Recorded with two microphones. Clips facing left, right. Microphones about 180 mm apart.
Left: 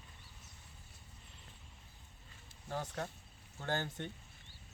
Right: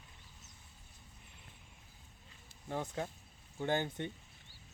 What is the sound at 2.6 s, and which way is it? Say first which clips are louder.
Speech: right 2 dB; 20° right (ahead or behind).